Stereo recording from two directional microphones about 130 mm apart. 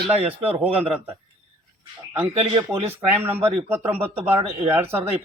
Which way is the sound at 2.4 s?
45° right (ahead or behind).